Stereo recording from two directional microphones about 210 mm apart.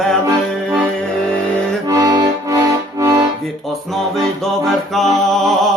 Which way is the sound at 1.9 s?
15° right (ahead or behind).